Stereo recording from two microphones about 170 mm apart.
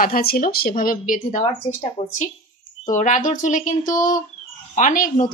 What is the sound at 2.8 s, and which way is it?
A woman's voice, 50° left (ahead or behind).